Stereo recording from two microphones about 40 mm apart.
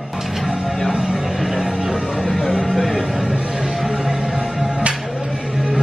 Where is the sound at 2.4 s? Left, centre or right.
Right.